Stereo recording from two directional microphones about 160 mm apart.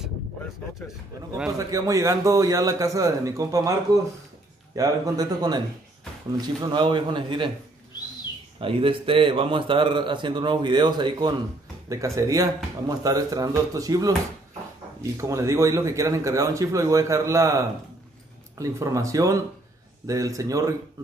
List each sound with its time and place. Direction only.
1.6 s speech: 20° right (ahead or behind)
8.5 s a man's voice: 35° right (ahead or behind)
15.1 s speech: 20° right (ahead or behind)